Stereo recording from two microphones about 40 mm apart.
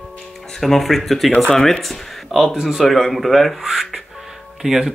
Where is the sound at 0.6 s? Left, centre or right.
Centre.